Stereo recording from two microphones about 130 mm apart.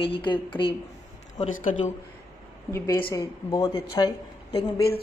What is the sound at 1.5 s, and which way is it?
Speech, 90° left.